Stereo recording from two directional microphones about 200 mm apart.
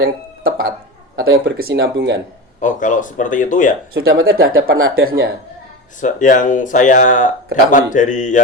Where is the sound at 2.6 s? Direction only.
40° left (ahead or behind).